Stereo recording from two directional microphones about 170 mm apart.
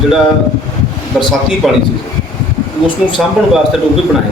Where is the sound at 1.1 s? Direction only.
Centre (ahead or behind).